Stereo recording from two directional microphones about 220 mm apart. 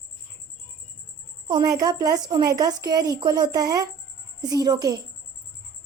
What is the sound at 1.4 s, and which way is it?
A woman's voice, 15° right (ahead or behind).